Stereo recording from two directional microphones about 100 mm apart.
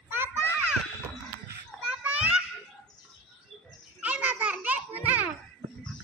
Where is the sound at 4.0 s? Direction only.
15° right (ahead or behind).